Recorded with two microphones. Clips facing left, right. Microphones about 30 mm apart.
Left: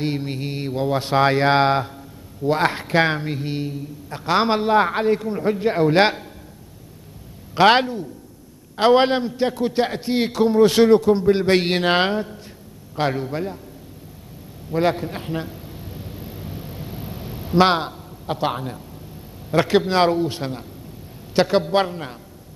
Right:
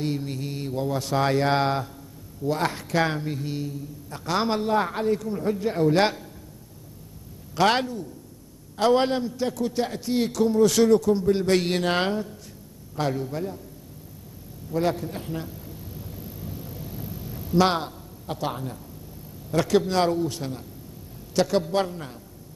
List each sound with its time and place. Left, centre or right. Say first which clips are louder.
0.0 s a man's voice: left 4 dB; left
7.5 s a man's voice: left 7 dB; left
14.7 s a sound: left 5 dB; left
19.5 s a man's voice: left 4 dB; left